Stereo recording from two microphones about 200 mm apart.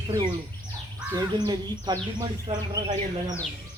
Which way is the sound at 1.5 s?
20° right (ahead or behind).